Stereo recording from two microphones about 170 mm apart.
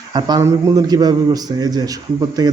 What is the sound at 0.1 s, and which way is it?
A man's voice, 25° right (ahead or behind).